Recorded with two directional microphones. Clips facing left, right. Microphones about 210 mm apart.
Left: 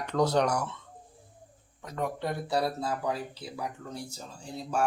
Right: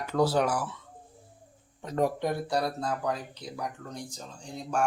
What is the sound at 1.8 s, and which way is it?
Speech, 25° right (ahead or behind).